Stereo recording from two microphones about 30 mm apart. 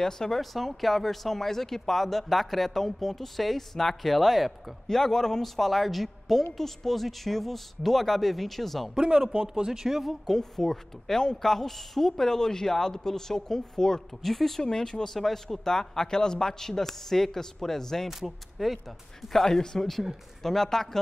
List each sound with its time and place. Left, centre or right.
0.0 s a woman's voice: centre
0.4 s speech: centre
4.8 s a woman's voice: centre
5.4 s speech: centre
9.4 s speech: right
9.8 s speech: centre
10.3 s a woman's voice: centre
14.2 s speech: centre
14.6 s a woman's voice: centre
18.0 s speech: centre
19.4 s a woman's voice: centre